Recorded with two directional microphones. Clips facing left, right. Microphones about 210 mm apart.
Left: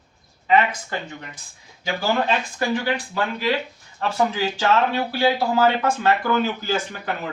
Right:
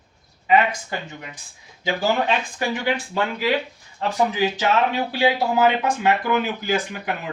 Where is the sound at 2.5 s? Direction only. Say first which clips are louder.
Left 1 dB; 15° right (ahead or behind).